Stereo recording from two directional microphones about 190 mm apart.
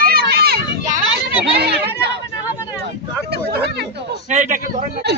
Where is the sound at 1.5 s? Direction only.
55° right (ahead or behind).